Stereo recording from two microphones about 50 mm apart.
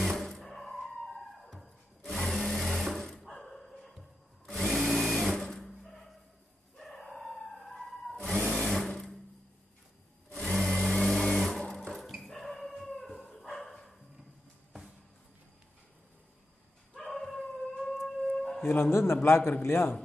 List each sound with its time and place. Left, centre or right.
0.0 s music: centre
4.5 s a sound: centre
6.8 s a sound: centre
8.5 s sewing machine: centre
10.4 s a sound: centre
10.7 s sewing machine: centre
12.3 s dog: centre
16.9 s howl: centre
18.6 s a man's voice: left